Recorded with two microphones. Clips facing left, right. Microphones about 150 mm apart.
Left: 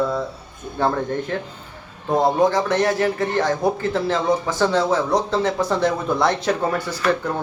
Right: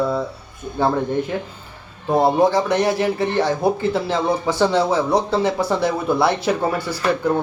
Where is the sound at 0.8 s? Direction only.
10° right (ahead or behind).